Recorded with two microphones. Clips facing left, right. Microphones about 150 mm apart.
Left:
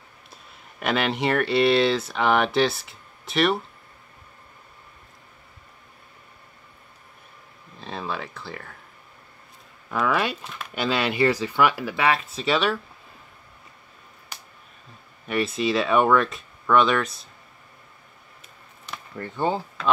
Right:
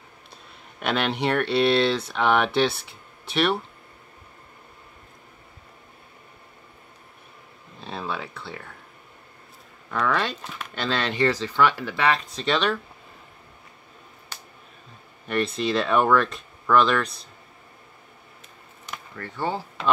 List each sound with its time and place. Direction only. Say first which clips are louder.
0.7 s speech: left 1 dB; centre (ahead or behind)
7.8 s speech: even; centre (ahead or behind)
9.8 s speech: left 1 dB; 5° left (ahead or behind)
14.3 s a sound: even; 15° left (ahead or behind)
15.2 s speech: left 1 dB; 5° left (ahead or behind)
19.1 s speech: left 3 dB; 15° left (ahead or behind)